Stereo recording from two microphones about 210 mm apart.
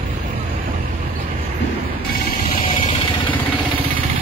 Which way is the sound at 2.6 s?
25° left (ahead or behind).